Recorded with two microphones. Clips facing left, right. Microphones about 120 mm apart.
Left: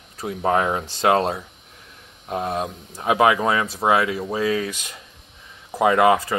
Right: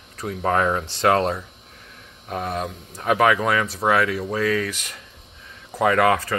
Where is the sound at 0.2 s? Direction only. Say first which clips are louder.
Left 1 dB; 15° left (ahead or behind).